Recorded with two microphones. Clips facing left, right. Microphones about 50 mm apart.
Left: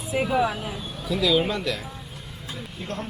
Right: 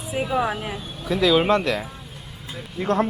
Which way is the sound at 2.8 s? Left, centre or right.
Right.